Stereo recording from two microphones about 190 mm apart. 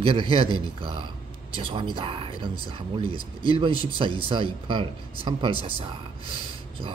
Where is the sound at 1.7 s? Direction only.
25° right (ahead or behind).